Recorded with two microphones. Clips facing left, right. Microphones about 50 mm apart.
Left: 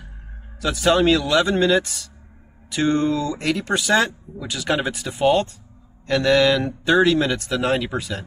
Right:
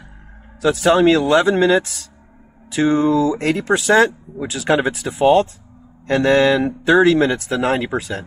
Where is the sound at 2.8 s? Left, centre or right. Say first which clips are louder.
Right 4 dB; centre.